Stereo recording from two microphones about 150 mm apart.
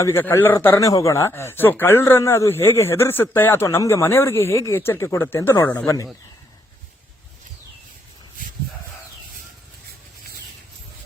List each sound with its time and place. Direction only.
0.0 s a man's voice: 15° left (ahead or behind)